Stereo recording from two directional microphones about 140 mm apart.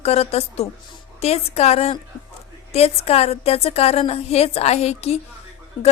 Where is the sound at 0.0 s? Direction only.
50° left (ahead or behind).